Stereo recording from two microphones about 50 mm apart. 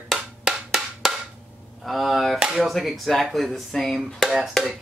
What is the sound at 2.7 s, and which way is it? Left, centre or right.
Speech, centre.